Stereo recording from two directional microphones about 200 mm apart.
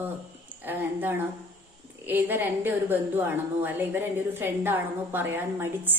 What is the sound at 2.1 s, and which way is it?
A woman's voice, 10° right (ahead or behind).